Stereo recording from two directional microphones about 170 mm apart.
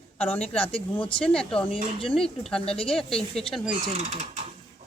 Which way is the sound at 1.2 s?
5° left (ahead or behind).